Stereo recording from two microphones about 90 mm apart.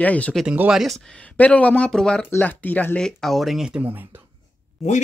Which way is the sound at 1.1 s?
15° left (ahead or behind).